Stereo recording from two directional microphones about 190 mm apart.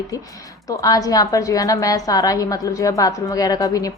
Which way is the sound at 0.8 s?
20° left (ahead or behind).